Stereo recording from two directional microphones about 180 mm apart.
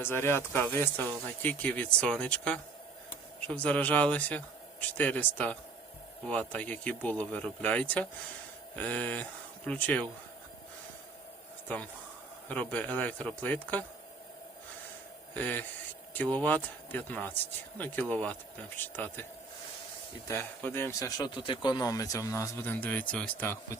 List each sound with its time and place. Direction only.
0.0 s speech: 15° left (ahead or behind)
12.5 s speech: 10° left (ahead or behind)
15.4 s speech: 10° left (ahead or behind)
20.2 s speech: 15° left (ahead or behind)
21.2 s speech: 25° left (ahead or behind); by 23.6 s 10° left (ahead or behind)